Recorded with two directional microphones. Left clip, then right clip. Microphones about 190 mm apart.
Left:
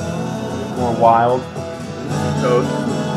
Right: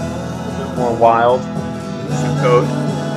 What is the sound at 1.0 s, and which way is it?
Speech, 25° right (ahead or behind).